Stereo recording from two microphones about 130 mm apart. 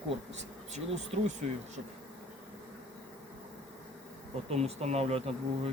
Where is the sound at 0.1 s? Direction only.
55° right (ahead or behind).